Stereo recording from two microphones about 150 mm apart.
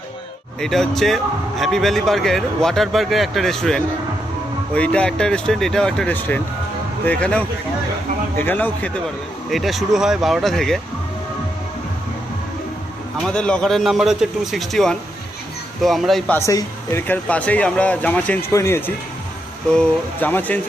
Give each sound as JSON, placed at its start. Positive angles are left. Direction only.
{"t": 0.6, "sound": "speech", "side_deg": 0}
{"t": 9.5, "sound": "speech", "side_deg": 0}
{"t": 13.2, "sound": "speech", "side_deg": 5}
{"t": 16.5, "sound": "speech", "side_deg": 25}
{"t": 17.1, "sound": "speech", "side_deg": 10}